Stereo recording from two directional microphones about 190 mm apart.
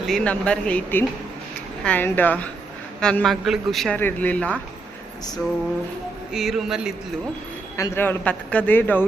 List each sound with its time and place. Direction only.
0.1 s a man's voice: 5° left (ahead or behind)
6.3 s a man's voice: centre (ahead or behind)
7.8 s a man's voice: 10° left (ahead or behind)